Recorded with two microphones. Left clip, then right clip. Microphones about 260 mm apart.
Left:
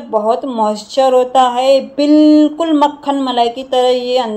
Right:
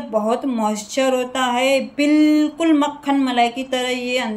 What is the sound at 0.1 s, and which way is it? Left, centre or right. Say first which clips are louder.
Speech: left 6 dB; centre.